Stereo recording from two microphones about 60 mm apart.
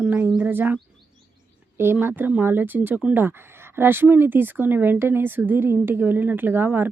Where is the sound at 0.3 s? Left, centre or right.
Right.